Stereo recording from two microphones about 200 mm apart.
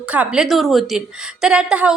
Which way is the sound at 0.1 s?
5° right (ahead or behind).